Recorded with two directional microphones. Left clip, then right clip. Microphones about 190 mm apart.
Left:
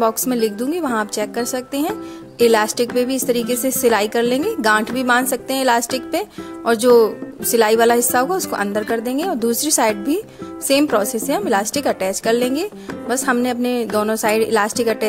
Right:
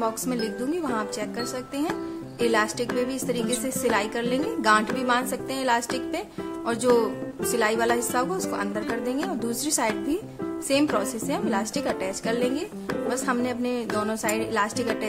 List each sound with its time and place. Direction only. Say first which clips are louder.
0.0 s a woman's voice: left 10 dB; 40° left (ahead or behind)